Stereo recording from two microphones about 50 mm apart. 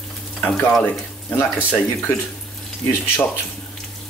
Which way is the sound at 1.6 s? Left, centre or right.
Left.